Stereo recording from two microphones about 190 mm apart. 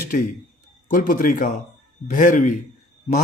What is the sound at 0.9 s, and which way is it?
A man's voice, 45° left (ahead or behind).